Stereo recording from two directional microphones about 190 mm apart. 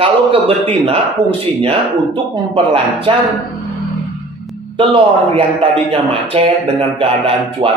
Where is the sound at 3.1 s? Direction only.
30° right (ahead or behind).